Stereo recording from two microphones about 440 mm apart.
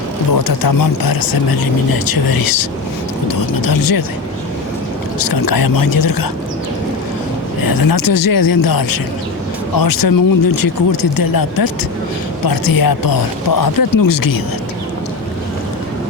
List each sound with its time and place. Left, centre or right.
0.3 s speech: left
5.2 s speech: left
7.6 s speech: left